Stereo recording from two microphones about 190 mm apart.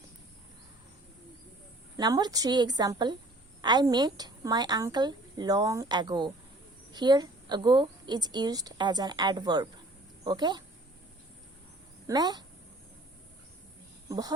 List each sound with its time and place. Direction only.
2.0 s a woman's voice: 20° right (ahead or behind)
12.0 s a woman's voice: 20° right (ahead or behind)
14.1 s a woman's voice: 20° right (ahead or behind)